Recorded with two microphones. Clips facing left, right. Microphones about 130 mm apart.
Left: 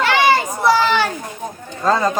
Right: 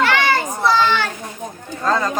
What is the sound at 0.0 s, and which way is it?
Children playing, 15° left (ahead or behind).